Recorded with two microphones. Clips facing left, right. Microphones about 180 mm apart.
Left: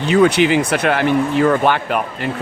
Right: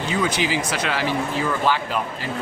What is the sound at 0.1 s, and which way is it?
Speech, 65° left (ahead or behind).